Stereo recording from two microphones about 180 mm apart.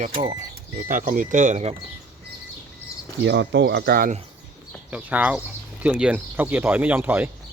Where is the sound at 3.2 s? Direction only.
75° right (ahead or behind); by 4.1 s 60° right (ahead or behind).